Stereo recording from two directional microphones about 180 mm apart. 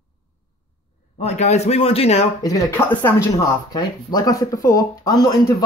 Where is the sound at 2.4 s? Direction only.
15° left (ahead or behind).